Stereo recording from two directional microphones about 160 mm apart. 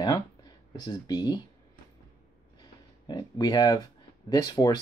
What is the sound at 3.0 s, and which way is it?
Speech, 25° left (ahead or behind).